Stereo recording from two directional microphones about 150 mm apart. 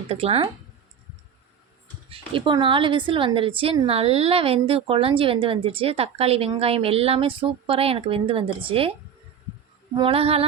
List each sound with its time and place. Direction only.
0.1 s a woman's voice: 40° right (ahead or behind)
2.0 s a woman's voice: 35° right (ahead or behind)
9.9 s a woman's voice: 35° right (ahead or behind)